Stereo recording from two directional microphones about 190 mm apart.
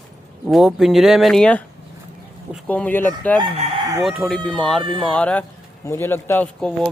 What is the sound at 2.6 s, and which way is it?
Speech, 10° left (ahead or behind).